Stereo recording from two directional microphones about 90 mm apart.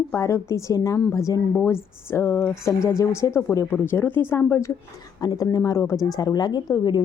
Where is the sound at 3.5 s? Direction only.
25° left (ahead or behind).